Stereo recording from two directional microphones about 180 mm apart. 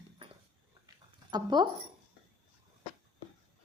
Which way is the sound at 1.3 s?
25° right (ahead or behind).